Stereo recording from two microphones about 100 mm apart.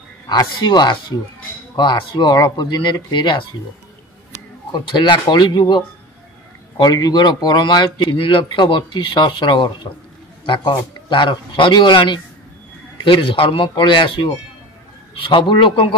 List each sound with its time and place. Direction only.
0.6 s a man's voice: 45° left (ahead or behind)
4.7 s a man's voice: 50° left (ahead or behind)